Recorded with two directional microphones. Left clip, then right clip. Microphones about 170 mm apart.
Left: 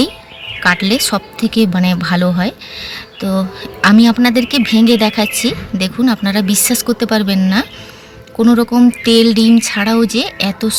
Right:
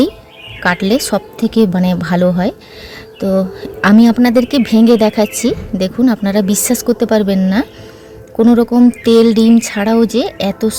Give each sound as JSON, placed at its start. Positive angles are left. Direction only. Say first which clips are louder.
{"t": 0.6, "sound": "a woman's voice", "louder": "left 1 dB", "side_deg": -45}